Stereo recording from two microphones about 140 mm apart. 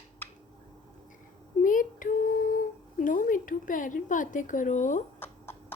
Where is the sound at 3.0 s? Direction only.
75° left (ahead or behind).